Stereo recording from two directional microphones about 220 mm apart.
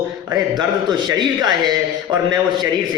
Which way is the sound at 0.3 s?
15° right (ahead or behind).